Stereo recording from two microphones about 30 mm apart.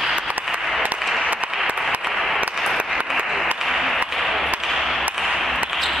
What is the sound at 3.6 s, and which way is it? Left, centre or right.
Applause, centre.